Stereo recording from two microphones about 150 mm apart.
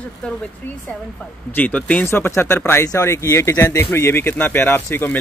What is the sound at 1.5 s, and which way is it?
Speech, 10° left (ahead or behind).